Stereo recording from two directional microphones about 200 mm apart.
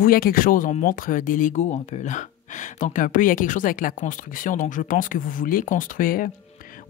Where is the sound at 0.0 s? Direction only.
45° left (ahead or behind).